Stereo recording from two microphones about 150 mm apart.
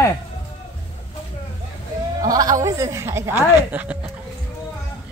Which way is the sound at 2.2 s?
25° right (ahead or behind).